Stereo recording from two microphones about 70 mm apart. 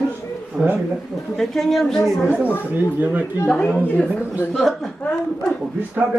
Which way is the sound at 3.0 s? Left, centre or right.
Right.